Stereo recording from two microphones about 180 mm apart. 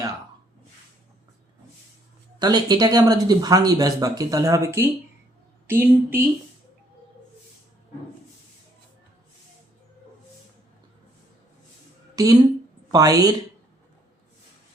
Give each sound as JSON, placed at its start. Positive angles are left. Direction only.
{"t": 2.4, "sound": "speech", "side_deg": -25}
{"t": 12.1, "sound": "speech", "side_deg": -20}